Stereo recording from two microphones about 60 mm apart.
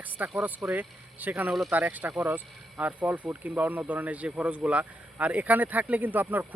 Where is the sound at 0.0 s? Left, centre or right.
Right.